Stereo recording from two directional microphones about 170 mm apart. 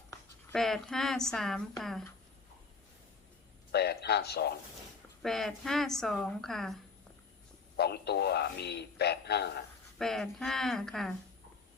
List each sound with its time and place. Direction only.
0.1 s a sound: 20° left (ahead or behind)
0.5 s speech: centre (ahead or behind)
3.7 s speech: 75° left (ahead or behind)
5.2 s speech: centre (ahead or behind)
7.8 s speech: 70° left (ahead or behind)
10.0 s speech: centre (ahead or behind)